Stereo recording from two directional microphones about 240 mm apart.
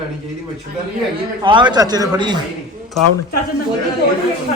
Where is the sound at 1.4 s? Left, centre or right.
Centre.